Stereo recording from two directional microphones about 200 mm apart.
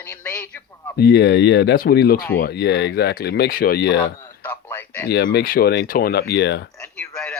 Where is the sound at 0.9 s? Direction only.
55° left (ahead or behind).